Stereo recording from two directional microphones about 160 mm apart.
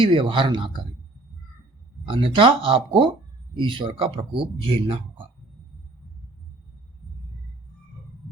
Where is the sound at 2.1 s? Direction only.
35° right (ahead or behind).